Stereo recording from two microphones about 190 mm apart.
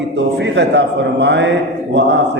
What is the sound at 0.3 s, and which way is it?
Speech, 70° right (ahead or behind).